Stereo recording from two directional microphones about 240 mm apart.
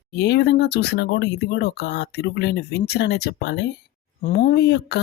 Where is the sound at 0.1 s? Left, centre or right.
Left.